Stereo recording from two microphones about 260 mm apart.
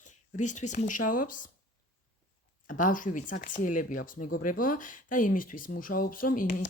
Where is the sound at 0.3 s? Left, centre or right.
Left.